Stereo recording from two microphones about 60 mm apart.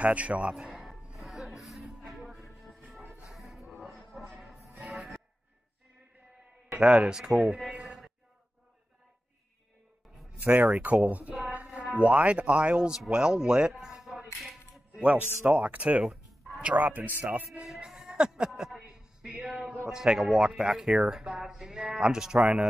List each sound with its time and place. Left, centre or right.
0.0 s music: right; by 5.2 s centre
6.8 s speech: centre
7.7 s a sound: centre
10.4 s speech: right
11.5 s a sound: right
11.9 s speech: right
13.1 s music: centre
15.0 s speech: right
16.0 s music: centre
16.7 s speech: right
17.9 s a sound: centre
19.9 s speech: centre